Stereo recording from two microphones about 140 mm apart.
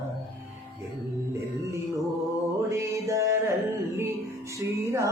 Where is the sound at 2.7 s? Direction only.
20° right (ahead or behind).